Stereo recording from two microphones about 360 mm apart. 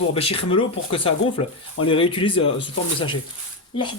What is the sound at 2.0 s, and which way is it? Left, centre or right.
Speech, centre.